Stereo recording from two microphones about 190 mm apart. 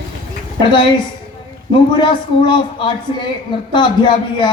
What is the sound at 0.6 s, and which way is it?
Speech, 25° left (ahead or behind).